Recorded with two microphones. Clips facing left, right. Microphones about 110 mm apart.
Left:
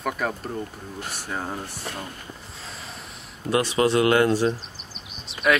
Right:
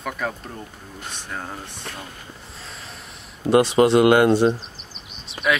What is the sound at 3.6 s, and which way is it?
Speech, 25° right (ahead or behind).